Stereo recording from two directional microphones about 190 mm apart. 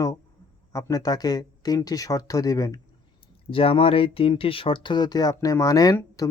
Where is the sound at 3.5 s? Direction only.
30° left (ahead or behind).